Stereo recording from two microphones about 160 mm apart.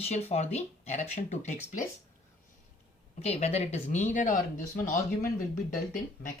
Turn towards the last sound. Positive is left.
turn(degrees=55)  # may be behind; listen again after turning